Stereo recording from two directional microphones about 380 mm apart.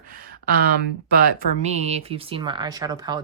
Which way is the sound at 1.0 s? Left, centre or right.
Right.